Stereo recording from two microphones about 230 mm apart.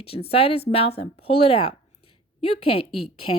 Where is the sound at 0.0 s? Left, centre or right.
Left.